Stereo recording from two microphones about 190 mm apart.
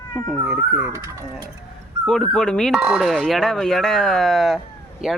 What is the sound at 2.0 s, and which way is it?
Speech, 5° left (ahead or behind).